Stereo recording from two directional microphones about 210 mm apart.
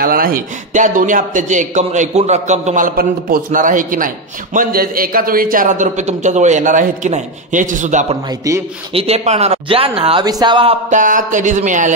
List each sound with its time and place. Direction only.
0.0 s a man's voice: 40° right (ahead or behind)
8.3 s a man's voice: 15° right (ahead or behind)
8.9 s speech: 30° right (ahead or behind)